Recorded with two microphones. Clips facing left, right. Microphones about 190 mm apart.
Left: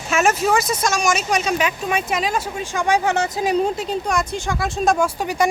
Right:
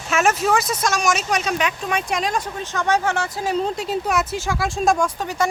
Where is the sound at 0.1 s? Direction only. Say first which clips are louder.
Left 1 dB; centre (ahead or behind); by 3.7 s 15° left (ahead or behind).